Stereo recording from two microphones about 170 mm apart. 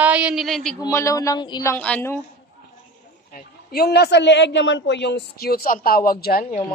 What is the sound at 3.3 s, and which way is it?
Speech, 65° left (ahead or behind).